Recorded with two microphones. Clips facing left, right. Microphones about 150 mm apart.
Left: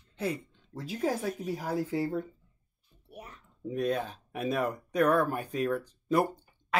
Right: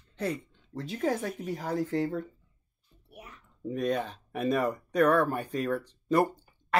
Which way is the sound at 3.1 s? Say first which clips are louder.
Left 2 dB; 35° left (ahead or behind).